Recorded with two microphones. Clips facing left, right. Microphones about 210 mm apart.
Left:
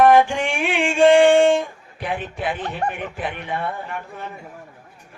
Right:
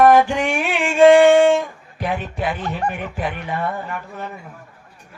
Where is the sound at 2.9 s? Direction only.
40° right (ahead or behind).